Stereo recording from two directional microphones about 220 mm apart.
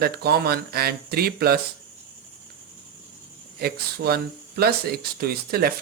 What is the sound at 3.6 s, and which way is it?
Speech, 45° right (ahead or behind).